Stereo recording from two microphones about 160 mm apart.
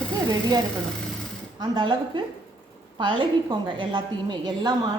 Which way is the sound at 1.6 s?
30° right (ahead or behind).